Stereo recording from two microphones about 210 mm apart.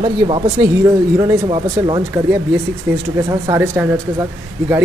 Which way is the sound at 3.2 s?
10° right (ahead or behind).